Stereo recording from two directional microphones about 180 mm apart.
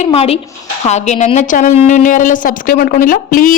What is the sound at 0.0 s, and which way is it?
Speech, 35° left (ahead or behind).